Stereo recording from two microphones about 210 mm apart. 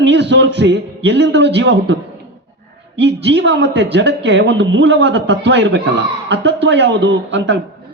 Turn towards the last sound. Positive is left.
turn(degrees=-55)  # may be behind; listen again after turning